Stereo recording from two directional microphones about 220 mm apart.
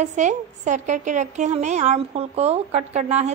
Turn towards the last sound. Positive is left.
turn(degrees=-30)  # may be behind; listen again after turning